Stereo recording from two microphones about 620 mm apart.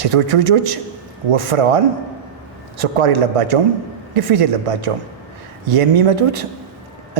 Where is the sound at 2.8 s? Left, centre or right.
Right.